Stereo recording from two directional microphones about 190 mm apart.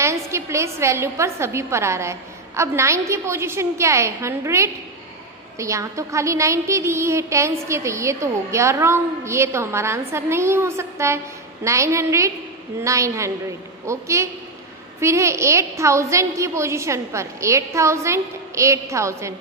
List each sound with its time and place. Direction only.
0.0 s a woman's voice: 15° right (ahead or behind)